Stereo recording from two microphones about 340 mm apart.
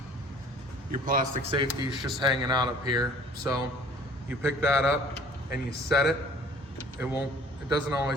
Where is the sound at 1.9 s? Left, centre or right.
Centre.